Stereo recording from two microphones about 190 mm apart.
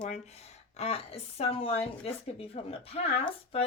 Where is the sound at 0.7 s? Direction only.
35° left (ahead or behind).